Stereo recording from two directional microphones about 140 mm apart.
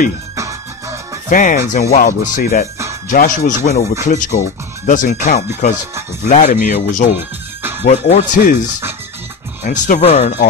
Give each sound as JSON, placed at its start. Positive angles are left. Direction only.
{"t": 0.4, "sound": "music", "side_deg": -25}
{"t": 1.3, "sound": "speech", "side_deg": 65}
{"t": 3.1, "sound": "speech", "side_deg": 65}
{"t": 5.6, "sound": "speech", "side_deg": 90}
{"t": 6.2, "sound": "speech", "side_deg": 55}
{"t": 9.6, "sound": "speech", "side_deg": 60}
{"t": 10.0, "sound": "speech", "side_deg": 50}